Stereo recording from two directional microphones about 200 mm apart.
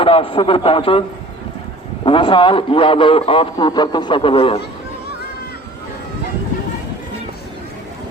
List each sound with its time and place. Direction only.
0.0 s a man's voice: 25° left (ahead or behind)
2.0 s a man's voice: 25° left (ahead or behind)